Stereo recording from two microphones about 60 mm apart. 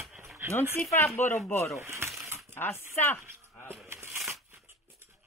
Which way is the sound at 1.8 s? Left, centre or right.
Right.